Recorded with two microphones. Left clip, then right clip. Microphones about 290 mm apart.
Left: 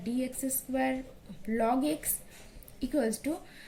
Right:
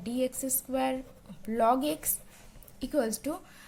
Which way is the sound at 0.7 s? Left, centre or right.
Right.